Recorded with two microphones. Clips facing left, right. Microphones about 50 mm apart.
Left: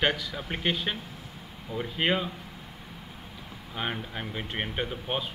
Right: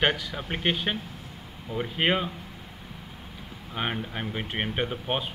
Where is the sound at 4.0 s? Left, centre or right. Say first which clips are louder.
Right 3 dB; centre.